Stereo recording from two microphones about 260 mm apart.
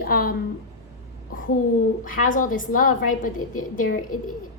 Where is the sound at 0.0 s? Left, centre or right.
Left.